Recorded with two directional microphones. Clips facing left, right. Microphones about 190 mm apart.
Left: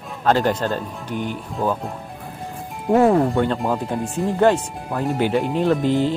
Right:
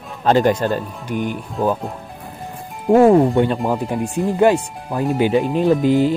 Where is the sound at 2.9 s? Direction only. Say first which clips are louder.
Right 4 dB; 15° right (ahead or behind).